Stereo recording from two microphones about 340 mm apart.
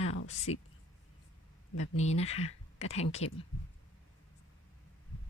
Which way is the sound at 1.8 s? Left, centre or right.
Centre.